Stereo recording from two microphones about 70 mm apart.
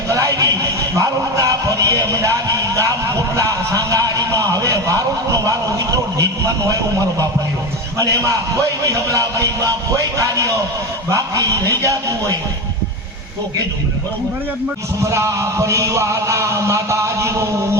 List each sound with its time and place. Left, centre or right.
0.1 s a sound: right
0.9 s music: right
3.3 s a man's voice: right
15.0 s a man's voice: right